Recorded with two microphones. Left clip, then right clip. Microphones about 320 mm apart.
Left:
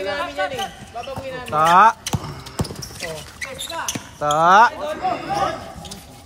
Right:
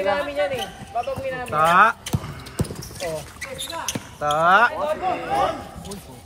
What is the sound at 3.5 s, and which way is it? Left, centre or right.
Basketball bounce, centre.